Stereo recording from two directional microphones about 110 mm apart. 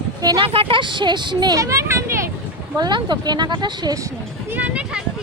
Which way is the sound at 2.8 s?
40° right (ahead or behind).